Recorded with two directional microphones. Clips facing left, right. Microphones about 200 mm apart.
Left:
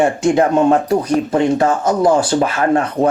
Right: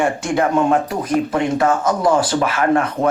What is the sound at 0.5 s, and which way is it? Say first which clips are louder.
Speech: left 4 dB; 40° left (ahead or behind).